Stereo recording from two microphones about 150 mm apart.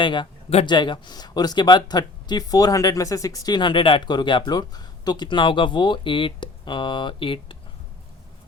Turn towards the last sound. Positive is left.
turn(degrees=35)  # may be behind; listen again after turning